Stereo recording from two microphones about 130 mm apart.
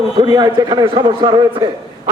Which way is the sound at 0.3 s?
30° right (ahead or behind).